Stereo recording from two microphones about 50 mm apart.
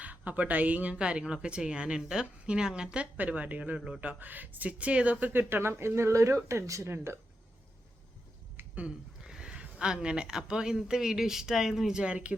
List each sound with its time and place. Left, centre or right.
0.0 s speech: right
3.2 s speech: right
5.2 s speech: right
8.6 s a sound: right
9.2 s speech: centre